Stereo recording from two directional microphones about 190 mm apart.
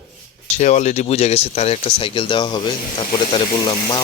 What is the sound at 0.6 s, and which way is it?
Speech, 35° left (ahead or behind).